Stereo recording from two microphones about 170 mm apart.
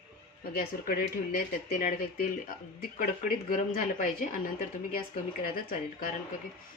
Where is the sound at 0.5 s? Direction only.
55° left (ahead or behind).